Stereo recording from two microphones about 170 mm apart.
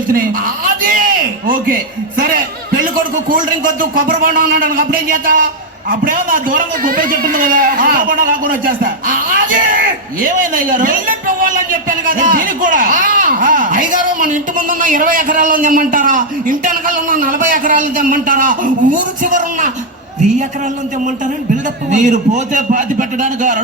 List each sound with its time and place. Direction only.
0.1 s a man's voice: 55° right (ahead or behind)
3.2 s a man's voice: 55° right (ahead or behind)
21.8 s a man's voice: 45° right (ahead or behind)